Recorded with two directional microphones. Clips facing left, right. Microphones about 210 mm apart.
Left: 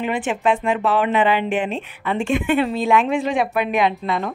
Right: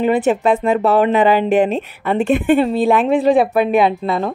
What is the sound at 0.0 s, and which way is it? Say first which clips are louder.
Speech: right 7 dB; 35° right (ahead or behind).